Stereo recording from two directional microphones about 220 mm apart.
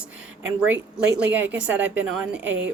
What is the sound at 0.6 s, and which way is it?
A woman's voice, 5° right (ahead or behind).